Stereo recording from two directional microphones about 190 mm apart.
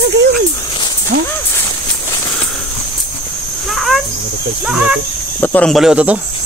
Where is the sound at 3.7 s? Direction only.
Centre (ahead or behind).